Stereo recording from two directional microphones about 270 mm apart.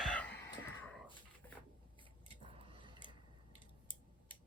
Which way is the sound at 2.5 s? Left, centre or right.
Centre.